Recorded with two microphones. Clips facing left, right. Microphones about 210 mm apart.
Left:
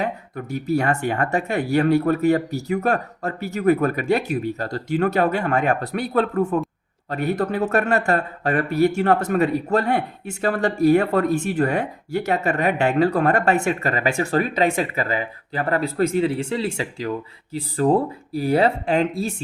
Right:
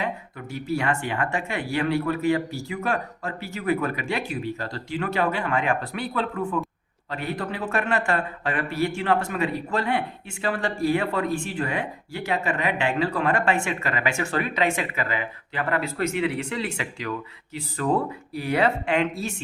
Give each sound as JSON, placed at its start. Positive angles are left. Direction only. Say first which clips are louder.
{"t": 0.0, "sound": "speech", "louder": "left 4 dB", "side_deg": 40}